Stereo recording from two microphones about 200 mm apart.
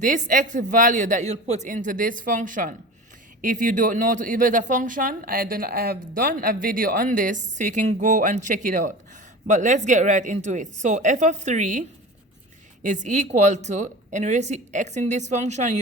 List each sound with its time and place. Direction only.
0.0 s speech: 40° right (ahead or behind)